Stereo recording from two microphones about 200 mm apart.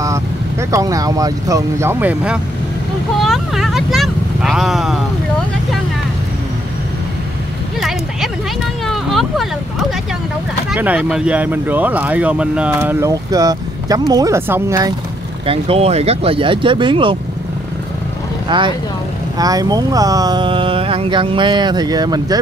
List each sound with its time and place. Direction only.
0.0 s speech: 15° right (ahead or behind)
8.8 s a sound: centre (ahead or behind)
10.7 s speech: 5° right (ahead or behind)
15.4 s speech: 30° right (ahead or behind)
18.5 s speech: 25° right (ahead or behind)